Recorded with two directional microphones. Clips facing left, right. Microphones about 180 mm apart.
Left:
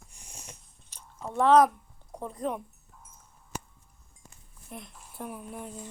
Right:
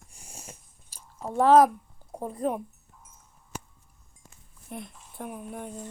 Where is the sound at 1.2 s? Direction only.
35° right (ahead or behind).